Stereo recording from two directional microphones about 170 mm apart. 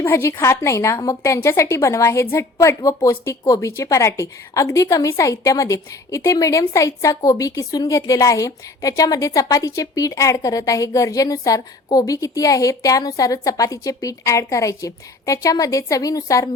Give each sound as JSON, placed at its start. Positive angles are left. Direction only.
{"t": 0.0, "sound": "a woman's voice", "side_deg": 15}